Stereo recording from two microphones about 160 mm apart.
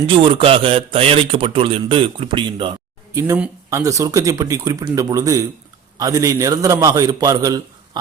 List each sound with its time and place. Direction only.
0.1 s a man's voice: 35° right (ahead or behind)
3.7 s speech: 20° right (ahead or behind)